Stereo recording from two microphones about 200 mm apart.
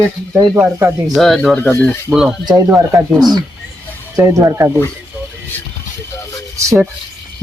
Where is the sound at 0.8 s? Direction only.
15° right (ahead or behind).